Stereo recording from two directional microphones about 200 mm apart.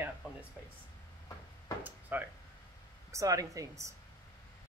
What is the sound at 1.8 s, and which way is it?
Speech, 10° right (ahead or behind).